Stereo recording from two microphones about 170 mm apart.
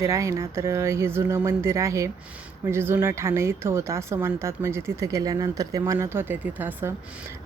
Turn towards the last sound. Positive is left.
turn(degrees=-10)  # may be behind; listen again after turning